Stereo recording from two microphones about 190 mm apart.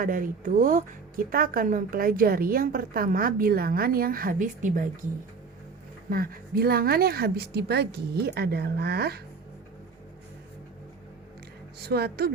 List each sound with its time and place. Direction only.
0.0 s a woman's voice: 45° right (ahead or behind)
6.1 s a woman's voice: 50° right (ahead or behind)
11.8 s a woman's voice: 60° right (ahead or behind)